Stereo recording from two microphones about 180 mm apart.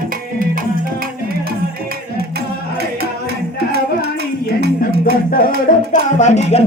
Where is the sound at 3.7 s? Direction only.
60° right (ahead or behind).